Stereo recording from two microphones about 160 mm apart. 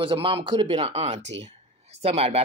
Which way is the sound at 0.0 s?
30° right (ahead or behind).